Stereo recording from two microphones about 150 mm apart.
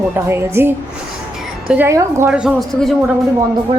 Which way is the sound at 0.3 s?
15° right (ahead or behind).